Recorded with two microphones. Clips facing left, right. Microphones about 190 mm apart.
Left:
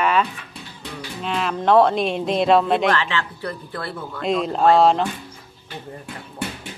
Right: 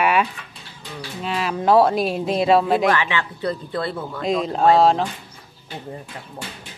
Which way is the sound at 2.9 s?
15° right (ahead or behind).